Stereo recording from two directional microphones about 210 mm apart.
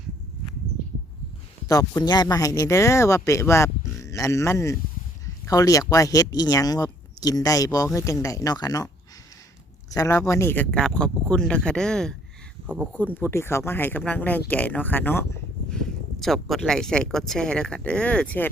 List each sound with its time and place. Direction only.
1.6 s speech: 15° left (ahead or behind)
9.9 s speech: 15° left (ahead or behind); by 12.9 s 5° right (ahead or behind)
12.9 s speech: 10° left (ahead or behind)